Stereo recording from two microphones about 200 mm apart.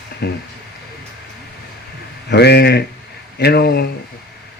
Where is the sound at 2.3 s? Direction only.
55° left (ahead or behind).